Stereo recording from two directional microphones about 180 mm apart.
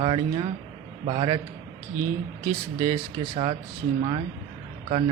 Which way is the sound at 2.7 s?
30° right (ahead or behind).